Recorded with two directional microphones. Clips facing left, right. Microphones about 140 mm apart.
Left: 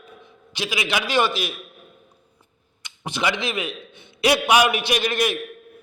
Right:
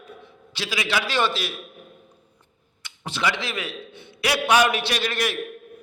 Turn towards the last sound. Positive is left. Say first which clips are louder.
# left 4 dB
turn(degrees=15)  # may be behind; listen again after turning